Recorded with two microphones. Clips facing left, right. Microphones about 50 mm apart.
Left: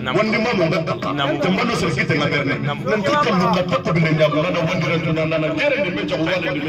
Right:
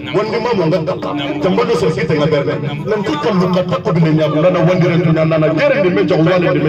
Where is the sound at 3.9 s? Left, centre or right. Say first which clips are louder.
Right 4 dB; centre.